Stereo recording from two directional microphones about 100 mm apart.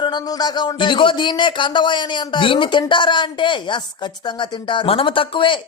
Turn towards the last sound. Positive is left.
turn(degrees=55)  # may be behind; listen again after turning